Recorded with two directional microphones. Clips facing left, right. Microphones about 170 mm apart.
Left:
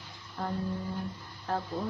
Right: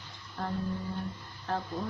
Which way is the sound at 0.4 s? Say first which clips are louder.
Left 1 dB; centre (ahead or behind).